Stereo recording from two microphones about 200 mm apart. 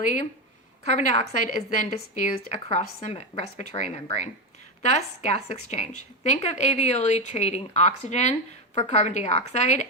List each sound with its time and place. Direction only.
0.9 s a woman's voice: 35° left (ahead or behind)